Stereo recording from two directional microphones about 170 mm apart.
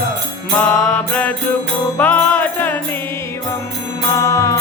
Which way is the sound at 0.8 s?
5° left (ahead or behind).